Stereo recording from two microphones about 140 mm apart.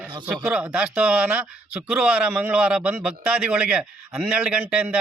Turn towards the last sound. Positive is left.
turn(degrees=-10)  # may be behind; listen again after turning